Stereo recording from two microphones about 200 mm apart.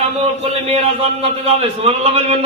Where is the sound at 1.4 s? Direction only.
30° right (ahead or behind).